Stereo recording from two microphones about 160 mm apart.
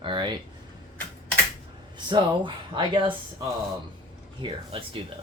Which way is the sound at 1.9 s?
30° right (ahead or behind).